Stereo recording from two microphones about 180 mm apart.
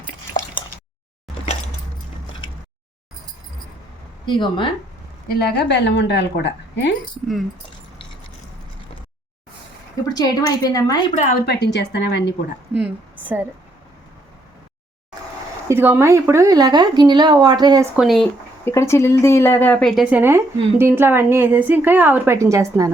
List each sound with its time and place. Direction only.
4.3 s a woman's voice: 25° left (ahead or behind)
5.3 s a woman's voice: 65° left (ahead or behind)
10.2 s a woman's voice: 20° left (ahead or behind)
11.4 s a woman's voice: 70° left (ahead or behind)
12.7 s a woman's voice: 10° right (ahead or behind)
15.7 s speech: 15° right (ahead or behind)
17.9 s speech: centre (ahead or behind)
18.6 s a woman's voice: 15° left (ahead or behind); by 22.9 s 15° right (ahead or behind)